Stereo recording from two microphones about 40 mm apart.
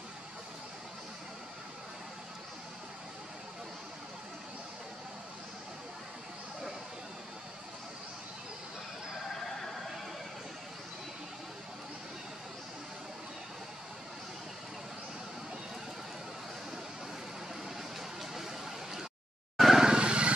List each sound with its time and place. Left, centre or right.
18.2 s a sound: centre
19.5 s vehicle: centre
19.8 s vehicle: centre
20.1 s vehicle: right